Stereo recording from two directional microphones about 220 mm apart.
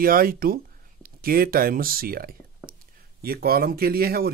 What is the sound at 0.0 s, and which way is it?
Speech, 40° right (ahead or behind).